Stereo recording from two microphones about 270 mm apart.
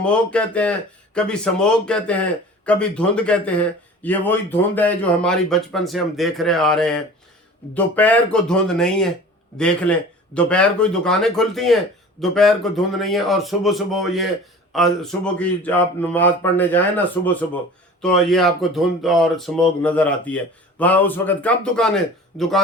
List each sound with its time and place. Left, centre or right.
0.0 s speech: centre